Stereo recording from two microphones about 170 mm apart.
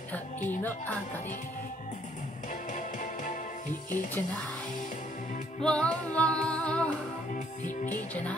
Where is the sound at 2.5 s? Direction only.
50° left (ahead or behind).